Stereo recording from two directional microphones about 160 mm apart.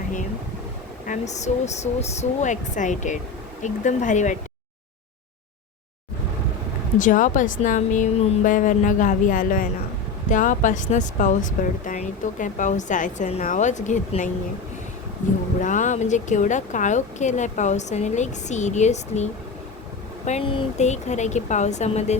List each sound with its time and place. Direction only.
1.0 s speech: 50° left (ahead or behind)
7.0 s speech: 55° left (ahead or behind)
15.6 s speech: 50° left (ahead or behind)